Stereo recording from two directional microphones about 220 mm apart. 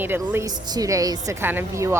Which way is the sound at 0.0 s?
10° right (ahead or behind).